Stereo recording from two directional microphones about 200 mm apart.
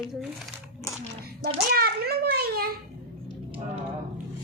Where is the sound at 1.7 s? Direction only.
50° right (ahead or behind).